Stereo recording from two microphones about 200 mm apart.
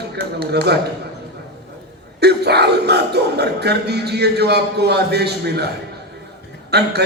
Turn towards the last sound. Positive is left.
turn(degrees=-55)  # may be behind; listen again after turning